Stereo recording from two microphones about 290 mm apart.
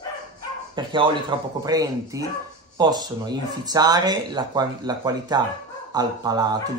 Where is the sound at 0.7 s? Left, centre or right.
Centre.